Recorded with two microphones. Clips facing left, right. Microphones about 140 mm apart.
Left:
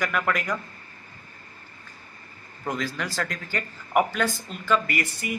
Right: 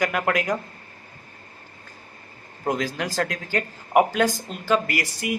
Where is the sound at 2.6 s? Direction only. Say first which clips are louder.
Right 4 dB; 45° right (ahead or behind).